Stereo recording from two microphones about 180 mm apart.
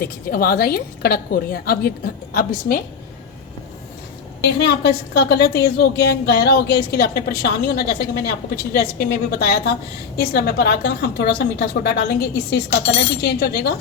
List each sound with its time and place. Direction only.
0.0 s a woman's voice: 55° left (ahead or behind)
4.4 s a woman's voice: 65° left (ahead or behind)